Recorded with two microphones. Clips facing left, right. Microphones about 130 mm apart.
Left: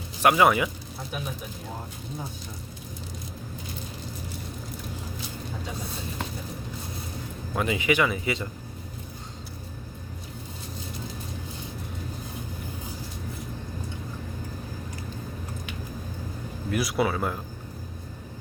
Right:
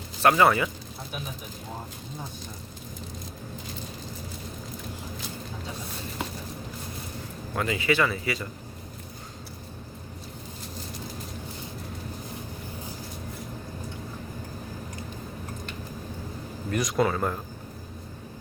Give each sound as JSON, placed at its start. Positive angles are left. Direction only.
{"t": 0.2, "sound": "speech", "side_deg": 10}
{"t": 7.5, "sound": "speech", "side_deg": 20}
{"t": 16.7, "sound": "speech", "side_deg": 5}